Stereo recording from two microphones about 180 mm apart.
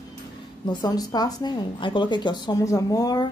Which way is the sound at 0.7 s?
20° left (ahead or behind).